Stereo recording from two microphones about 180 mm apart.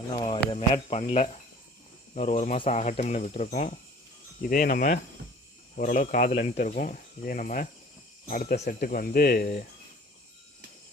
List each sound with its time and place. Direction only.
0.5 s speech: 35° left (ahead or behind); by 9.6 s 60° left (ahead or behind)